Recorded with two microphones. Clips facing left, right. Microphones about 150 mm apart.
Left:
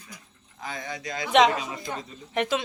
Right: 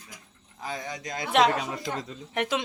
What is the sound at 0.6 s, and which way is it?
Speech, 35° right (ahead or behind).